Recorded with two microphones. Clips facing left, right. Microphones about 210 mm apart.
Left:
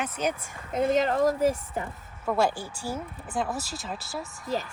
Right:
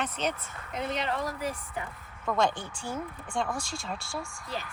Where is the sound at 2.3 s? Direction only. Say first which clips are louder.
Left 2 dB; 10° left (ahead or behind).